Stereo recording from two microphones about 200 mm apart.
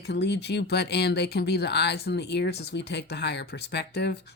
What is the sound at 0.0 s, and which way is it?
A woman's voice, 55° left (ahead or behind).